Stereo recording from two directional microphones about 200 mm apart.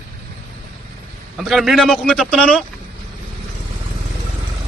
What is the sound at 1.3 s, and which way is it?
Speech, centre (ahead or behind).